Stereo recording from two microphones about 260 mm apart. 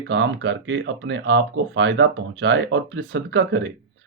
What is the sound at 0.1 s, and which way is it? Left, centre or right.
Speech, right.